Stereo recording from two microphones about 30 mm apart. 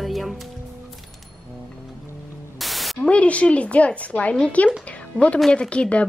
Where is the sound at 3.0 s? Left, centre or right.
Left.